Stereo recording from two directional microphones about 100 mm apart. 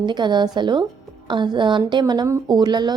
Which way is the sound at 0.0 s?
50° right (ahead or behind).